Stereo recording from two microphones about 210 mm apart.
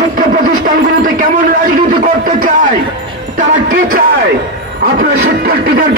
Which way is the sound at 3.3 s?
40° right (ahead or behind).